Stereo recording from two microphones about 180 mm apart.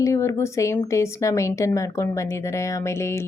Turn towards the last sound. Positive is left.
turn(degrees=15)  # may be behind; listen again after turning